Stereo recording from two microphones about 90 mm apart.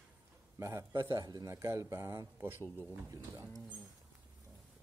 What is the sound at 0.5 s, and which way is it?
A man's voice, 35° right (ahead or behind).